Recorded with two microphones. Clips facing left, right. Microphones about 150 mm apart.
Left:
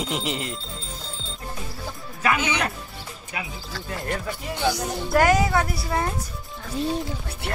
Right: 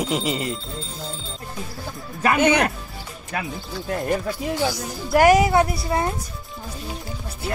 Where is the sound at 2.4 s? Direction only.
55° right (ahead or behind).